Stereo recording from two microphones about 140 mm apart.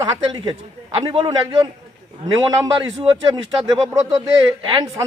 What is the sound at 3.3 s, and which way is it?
Speech, 25° right (ahead or behind).